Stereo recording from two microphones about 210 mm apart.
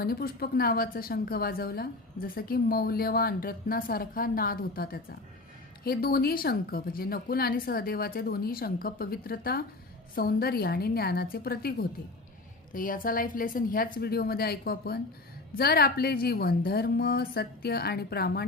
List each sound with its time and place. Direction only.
0.0 s a woman's voice: 45° left (ahead or behind)